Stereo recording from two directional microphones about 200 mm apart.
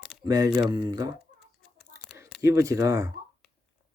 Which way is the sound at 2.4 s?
15° right (ahead or behind).